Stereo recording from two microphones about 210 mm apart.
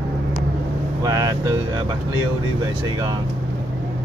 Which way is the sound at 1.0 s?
15° right (ahead or behind).